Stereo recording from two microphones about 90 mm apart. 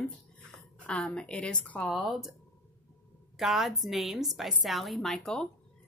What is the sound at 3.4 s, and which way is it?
A woman's voice, centre (ahead or behind).